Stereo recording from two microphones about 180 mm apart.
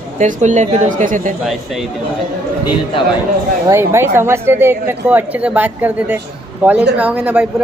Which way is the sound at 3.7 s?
15° right (ahead or behind).